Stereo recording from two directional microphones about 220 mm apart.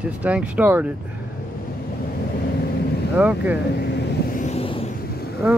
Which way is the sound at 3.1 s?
5° right (ahead or behind).